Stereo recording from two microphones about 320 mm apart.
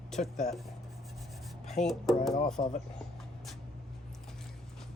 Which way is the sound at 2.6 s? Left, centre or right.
Left.